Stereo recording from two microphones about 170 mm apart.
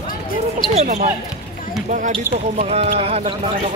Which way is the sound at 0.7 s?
45° right (ahead or behind).